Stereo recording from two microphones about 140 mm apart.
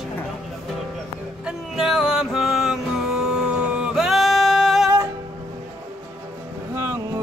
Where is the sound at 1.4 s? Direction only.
5° right (ahead or behind).